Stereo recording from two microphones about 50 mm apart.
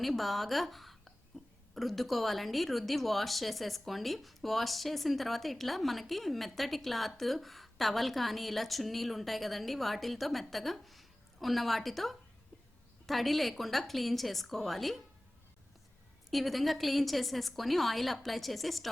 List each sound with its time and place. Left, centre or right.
0.0 s a woman's voice: centre
1.3 s hiccup: centre
1.7 s a woman's voice: centre
16.3 s a woman's voice: centre